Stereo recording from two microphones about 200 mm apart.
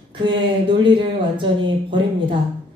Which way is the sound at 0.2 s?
25° right (ahead or behind).